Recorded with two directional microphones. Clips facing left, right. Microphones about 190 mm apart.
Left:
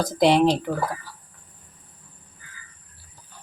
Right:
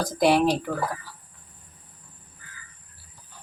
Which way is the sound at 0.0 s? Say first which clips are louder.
Left 2 dB; 20° left (ahead or behind).